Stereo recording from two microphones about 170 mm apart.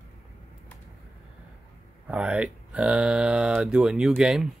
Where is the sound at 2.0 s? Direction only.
5° right (ahead or behind).